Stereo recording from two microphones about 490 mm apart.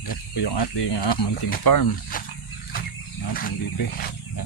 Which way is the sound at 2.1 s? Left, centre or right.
Centre.